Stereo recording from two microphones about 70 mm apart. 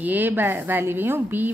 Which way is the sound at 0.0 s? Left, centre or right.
Right.